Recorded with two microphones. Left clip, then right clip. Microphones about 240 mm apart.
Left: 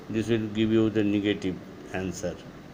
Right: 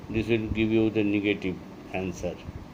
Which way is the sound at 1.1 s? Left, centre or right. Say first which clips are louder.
Even; left.